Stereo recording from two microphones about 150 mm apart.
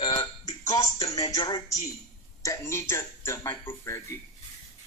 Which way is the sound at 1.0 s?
25° left (ahead or behind).